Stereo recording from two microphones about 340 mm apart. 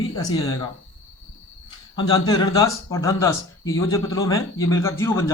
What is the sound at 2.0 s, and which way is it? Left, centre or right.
Speech, centre.